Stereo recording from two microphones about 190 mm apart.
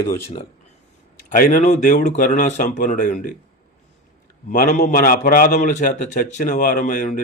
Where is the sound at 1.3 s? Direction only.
45° left (ahead or behind).